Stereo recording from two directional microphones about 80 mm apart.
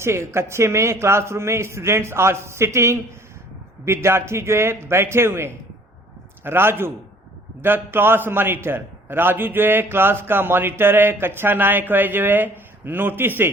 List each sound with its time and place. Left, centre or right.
0.0 s a man's voice: right